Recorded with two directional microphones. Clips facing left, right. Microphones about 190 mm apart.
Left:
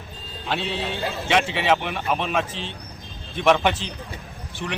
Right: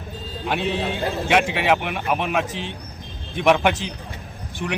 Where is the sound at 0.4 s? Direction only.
15° right (ahead or behind).